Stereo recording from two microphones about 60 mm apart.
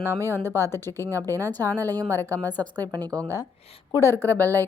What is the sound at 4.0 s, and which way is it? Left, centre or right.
Speech, left.